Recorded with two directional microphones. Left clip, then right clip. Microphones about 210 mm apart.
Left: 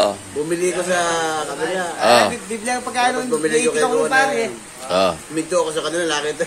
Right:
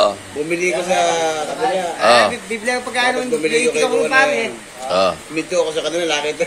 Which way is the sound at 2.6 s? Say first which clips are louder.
Right 1 dB; 5° left (ahead or behind).